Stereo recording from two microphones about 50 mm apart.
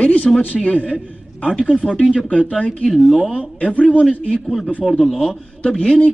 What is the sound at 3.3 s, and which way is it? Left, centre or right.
A man's voice, left.